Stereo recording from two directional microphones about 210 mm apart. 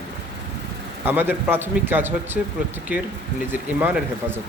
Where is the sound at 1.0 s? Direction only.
10° right (ahead or behind).